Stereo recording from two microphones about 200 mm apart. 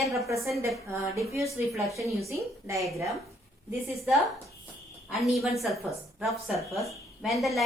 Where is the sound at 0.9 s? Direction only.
15° right (ahead or behind).